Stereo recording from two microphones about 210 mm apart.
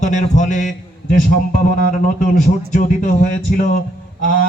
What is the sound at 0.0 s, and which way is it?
Speech, 35° left (ahead or behind).